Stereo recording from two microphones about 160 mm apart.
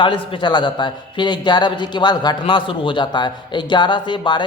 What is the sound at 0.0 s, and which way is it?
A man's voice, 30° left (ahead or behind).